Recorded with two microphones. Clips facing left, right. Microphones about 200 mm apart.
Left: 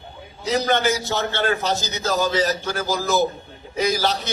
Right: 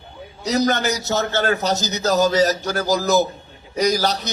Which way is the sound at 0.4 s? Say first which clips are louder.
Right 1 dB; 40° right (ahead or behind).